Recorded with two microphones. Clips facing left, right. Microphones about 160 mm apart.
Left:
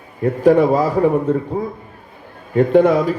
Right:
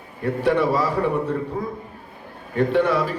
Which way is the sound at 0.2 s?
40° left (ahead or behind).